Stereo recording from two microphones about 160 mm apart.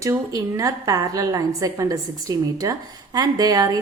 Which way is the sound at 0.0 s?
20° right (ahead or behind).